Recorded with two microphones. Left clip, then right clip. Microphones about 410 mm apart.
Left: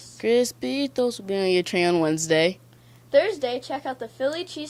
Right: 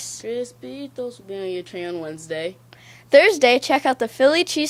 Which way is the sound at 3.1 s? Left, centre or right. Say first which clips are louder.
Right 8 dB; right.